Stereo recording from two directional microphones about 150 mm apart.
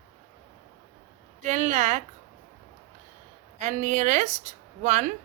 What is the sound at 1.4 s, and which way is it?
Speech, 50° right (ahead or behind).